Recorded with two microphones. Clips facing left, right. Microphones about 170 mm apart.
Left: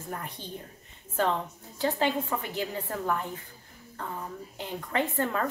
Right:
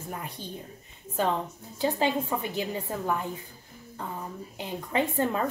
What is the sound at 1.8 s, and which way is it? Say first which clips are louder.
A woman's voice: right 1 dB; 15° right (ahead or behind).